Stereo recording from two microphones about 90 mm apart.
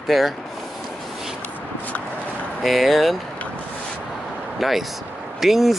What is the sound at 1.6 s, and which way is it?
Shuffle, 15° left (ahead or behind).